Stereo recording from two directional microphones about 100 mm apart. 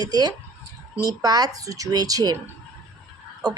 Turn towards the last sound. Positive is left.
turn(degrees=-40)  # may be behind; listen again after turning